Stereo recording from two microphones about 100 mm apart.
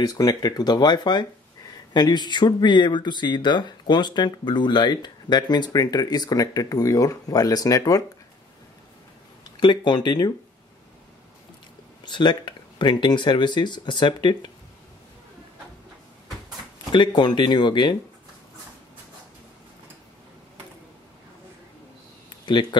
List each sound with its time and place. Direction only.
0.0 s speech: 40° left (ahead or behind)
9.4 s speech: 50° left (ahead or behind)
12.0 s speech: 50° left (ahead or behind)
16.9 s speech: 50° left (ahead or behind)
22.5 s speech: 50° left (ahead or behind)